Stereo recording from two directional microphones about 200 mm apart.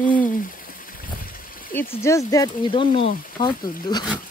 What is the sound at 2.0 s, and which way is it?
Speech, 15° left (ahead or behind).